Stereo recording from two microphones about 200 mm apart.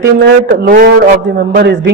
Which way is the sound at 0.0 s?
55° right (ahead or behind).